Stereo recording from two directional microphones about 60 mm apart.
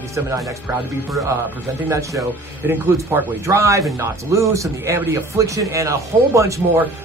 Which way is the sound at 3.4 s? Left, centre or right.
Right.